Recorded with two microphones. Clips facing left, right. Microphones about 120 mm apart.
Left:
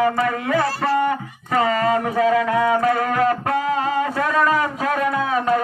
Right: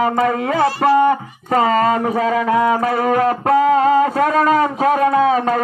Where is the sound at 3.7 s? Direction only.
40° right (ahead or behind).